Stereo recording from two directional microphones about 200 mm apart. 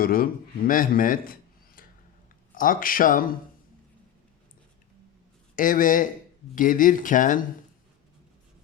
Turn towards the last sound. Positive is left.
turn(degrees=40)  # may be behind; listen again after turning